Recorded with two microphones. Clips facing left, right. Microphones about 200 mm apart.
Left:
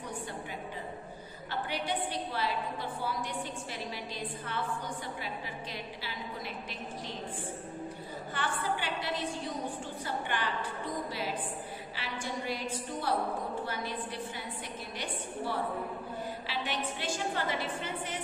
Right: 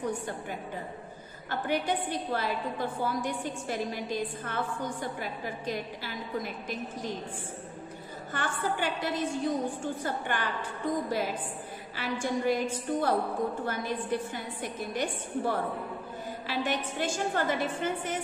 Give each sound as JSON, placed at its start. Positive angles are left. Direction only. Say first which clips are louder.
{"t": 1.5, "sound": "a woman's voice", "louder": "right 5 dB", "side_deg": -50}
{"t": 8.3, "sound": "a woman's voice", "louder": "right 2 dB", "side_deg": -45}
{"t": 12.0, "sound": "a woman's voice", "louder": "right 9 dB", "side_deg": -45}